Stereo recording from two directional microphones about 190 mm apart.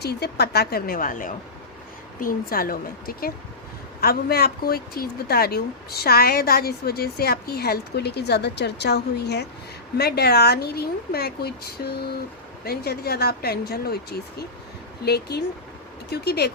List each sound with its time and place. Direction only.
0.0 s speech: 60° left (ahead or behind)